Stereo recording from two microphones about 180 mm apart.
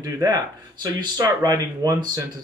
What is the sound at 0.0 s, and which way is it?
Speech, 20° right (ahead or behind).